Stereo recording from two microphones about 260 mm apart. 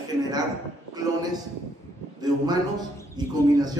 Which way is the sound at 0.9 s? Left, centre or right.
Centre.